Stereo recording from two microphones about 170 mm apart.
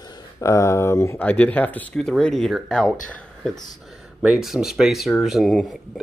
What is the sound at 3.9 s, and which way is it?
Speech, 5° right (ahead or behind).